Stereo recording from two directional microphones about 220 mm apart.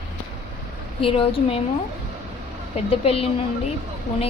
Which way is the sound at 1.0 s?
25° left (ahead or behind).